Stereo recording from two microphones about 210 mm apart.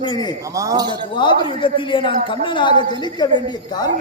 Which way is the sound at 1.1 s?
25° left (ahead or behind).